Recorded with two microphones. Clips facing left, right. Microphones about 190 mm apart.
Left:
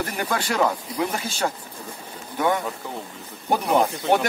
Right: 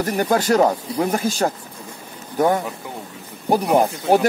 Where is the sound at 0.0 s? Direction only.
40° right (ahead or behind).